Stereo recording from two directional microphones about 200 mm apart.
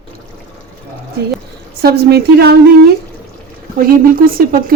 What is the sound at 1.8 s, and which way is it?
Speech, 50° right (ahead or behind).